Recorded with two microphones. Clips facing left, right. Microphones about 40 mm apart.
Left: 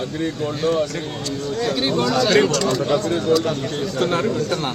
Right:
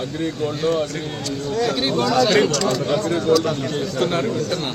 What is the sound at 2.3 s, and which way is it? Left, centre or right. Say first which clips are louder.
A man's voice: left 1 dB; left.